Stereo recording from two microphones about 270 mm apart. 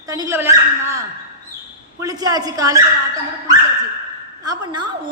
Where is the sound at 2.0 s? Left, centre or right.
Centre.